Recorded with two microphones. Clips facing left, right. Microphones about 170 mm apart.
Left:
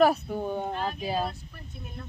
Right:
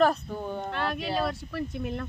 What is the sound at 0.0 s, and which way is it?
Speech, 10° left (ahead or behind).